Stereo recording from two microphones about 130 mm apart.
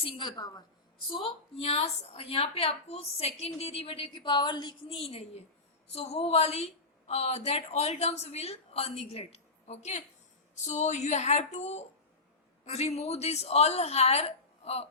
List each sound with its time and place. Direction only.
0.0 s a woman's voice: 40° left (ahead or behind)
4.9 s a woman's voice: 50° left (ahead or behind)